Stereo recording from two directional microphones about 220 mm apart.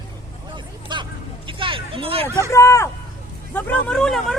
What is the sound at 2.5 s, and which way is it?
Speech, 15° left (ahead or behind).